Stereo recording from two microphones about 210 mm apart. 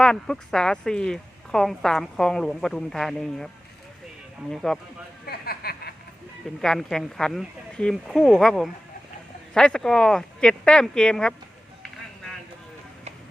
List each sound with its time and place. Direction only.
0.0 s a woman's voice: 5° left (ahead or behind)
4.5 s a woman's voice: centre (ahead or behind)
5.2 s a sound: 50° left (ahead or behind)
6.6 s a woman's voice: centre (ahead or behind)